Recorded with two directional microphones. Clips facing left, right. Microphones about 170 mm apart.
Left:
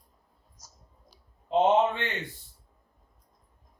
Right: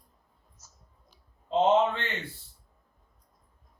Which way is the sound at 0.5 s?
35° left (ahead or behind).